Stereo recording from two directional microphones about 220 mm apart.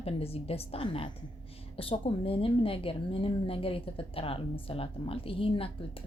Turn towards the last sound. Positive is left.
turn(degrees=25)  # may be behind; listen again after turning